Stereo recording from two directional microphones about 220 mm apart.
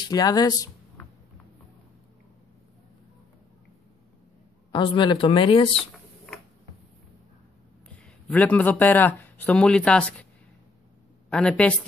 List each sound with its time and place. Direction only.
0.0 s speech: 15° left (ahead or behind)
4.7 s speech: 20° left (ahead or behind)
5.8 s a sound: centre (ahead or behind)
8.0 s a man's voice: 5° left (ahead or behind)
11.2 s speech: 5° left (ahead or behind)